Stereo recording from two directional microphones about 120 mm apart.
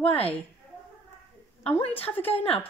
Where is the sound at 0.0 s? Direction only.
55° left (ahead or behind).